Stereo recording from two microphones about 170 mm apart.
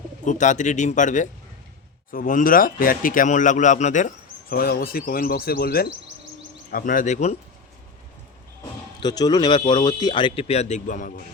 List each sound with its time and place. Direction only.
0.3 s speech: 45° left (ahead or behind)
9.0 s speech: 25° left (ahead or behind); by 11.1 s 50° left (ahead or behind)